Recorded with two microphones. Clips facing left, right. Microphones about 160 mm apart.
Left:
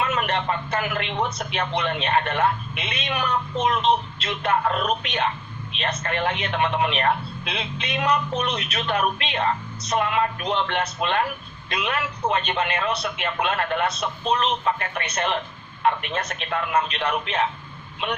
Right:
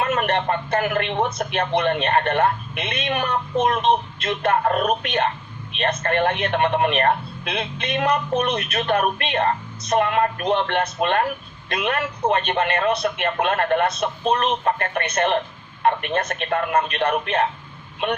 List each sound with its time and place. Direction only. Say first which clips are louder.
0.0 s a man's voice: right 3 dB; 50° right (ahead or behind)